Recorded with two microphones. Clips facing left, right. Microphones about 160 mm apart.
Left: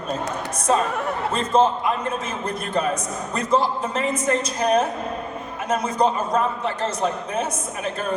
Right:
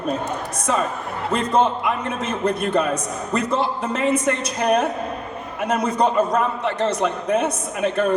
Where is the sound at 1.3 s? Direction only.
65° right (ahead or behind).